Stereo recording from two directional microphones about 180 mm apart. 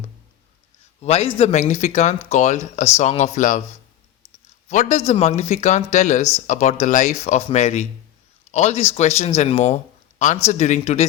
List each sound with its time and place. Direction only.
1.0 s speech: 35° left (ahead or behind)
4.7 s speech: 40° left (ahead or behind)